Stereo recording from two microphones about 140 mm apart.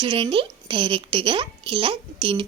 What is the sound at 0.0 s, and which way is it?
A woman's voice, 35° right (ahead or behind).